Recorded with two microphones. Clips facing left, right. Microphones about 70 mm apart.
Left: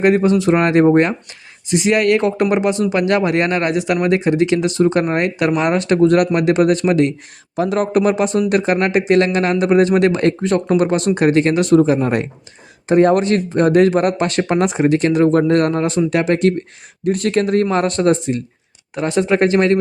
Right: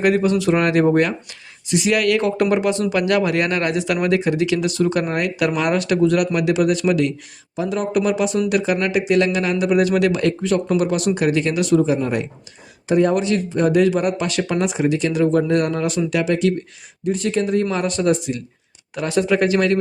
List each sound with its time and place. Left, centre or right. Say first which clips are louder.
0.0 s speech: left 3 dB; left
6.0 s speech: left 4 dB; left
7.5 s speech: left 4 dB; left
17.0 s speech: left 4 dB; left